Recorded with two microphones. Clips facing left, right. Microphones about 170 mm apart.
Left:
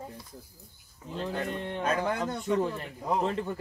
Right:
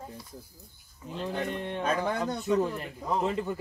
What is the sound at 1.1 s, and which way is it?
Speech, 5° right (ahead or behind).